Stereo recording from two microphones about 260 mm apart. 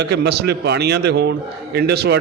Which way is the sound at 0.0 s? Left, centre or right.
Right.